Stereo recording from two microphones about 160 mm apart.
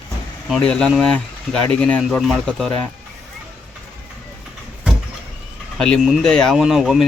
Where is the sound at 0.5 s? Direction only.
5° left (ahead or behind).